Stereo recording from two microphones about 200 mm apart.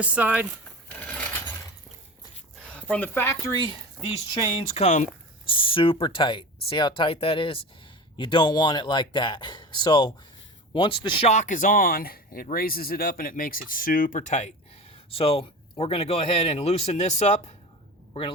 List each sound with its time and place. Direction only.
0.0 s speech: 5° right (ahead or behind)
0.9 s mechanisms: 5° left (ahead or behind)
2.6 s speech: 5° left (ahead or behind)
4.7 s a man's voice: 35° left (ahead or behind)